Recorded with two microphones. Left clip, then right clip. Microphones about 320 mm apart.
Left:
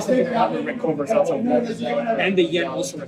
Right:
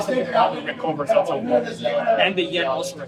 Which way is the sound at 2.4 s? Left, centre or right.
Centre.